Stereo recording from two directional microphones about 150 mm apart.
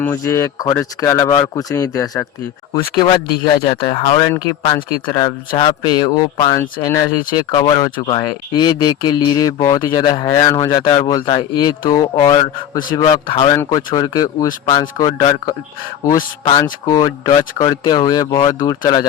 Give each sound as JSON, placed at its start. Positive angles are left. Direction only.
{"t": 0.0, "sound": "speech", "side_deg": 20}
{"t": 13.6, "sound": "speech", "side_deg": 25}